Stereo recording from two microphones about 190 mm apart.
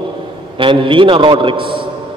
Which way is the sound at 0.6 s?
25° right (ahead or behind).